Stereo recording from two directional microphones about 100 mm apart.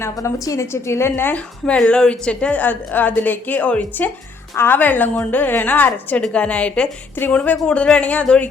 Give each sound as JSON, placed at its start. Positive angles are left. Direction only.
{"t": 0.0, "sound": "a woman's voice", "side_deg": 30}